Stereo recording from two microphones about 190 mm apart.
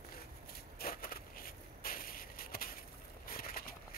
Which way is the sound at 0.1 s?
50° left (ahead or behind).